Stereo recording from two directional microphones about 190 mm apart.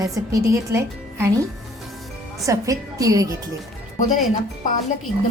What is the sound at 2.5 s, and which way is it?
Speech, 20° right (ahead or behind).